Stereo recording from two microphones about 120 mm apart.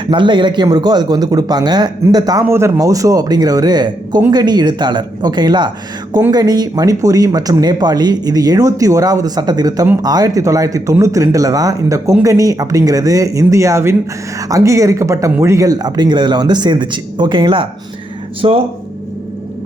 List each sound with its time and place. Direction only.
0.0 s speech: 40° right (ahead or behind)
2.5 s speech: 20° right (ahead or behind); by 18.6 s 50° right (ahead or behind)